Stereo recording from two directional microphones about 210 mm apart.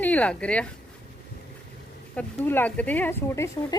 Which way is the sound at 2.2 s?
10° left (ahead or behind).